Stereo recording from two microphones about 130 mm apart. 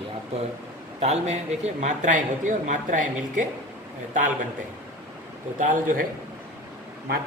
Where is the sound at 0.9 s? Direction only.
60° right (ahead or behind); by 3.4 s 80° right.